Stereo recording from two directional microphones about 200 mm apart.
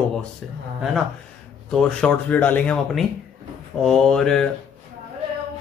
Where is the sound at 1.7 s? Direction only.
5° left (ahead or behind).